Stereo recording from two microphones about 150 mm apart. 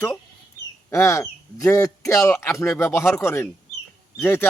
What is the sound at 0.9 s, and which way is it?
Speech, 20° left (ahead or behind).